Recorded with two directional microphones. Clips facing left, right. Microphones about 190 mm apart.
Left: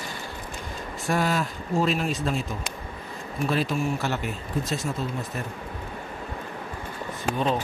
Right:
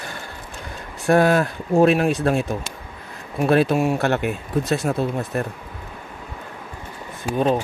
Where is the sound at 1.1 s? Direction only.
60° right (ahead or behind).